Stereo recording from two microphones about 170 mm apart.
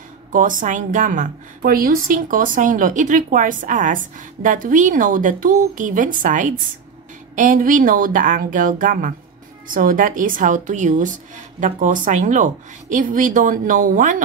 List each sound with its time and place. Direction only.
0.3 s a woman's voice: 50° right (ahead or behind)